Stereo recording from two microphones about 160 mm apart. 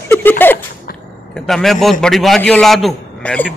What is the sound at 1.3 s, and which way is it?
A man's voice, centre (ahead or behind).